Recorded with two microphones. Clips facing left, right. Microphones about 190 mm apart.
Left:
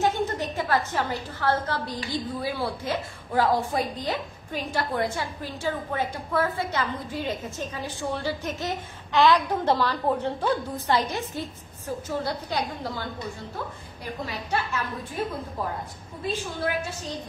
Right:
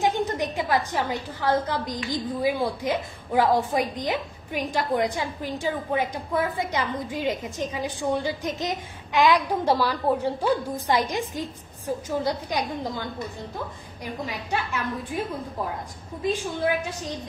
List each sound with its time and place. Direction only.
0.0 s a woman's voice: 15° right (ahead or behind)
14.2 s a woman's voice: 15° right (ahead or behind)
16.3 s a woman's voice: 15° right (ahead or behind)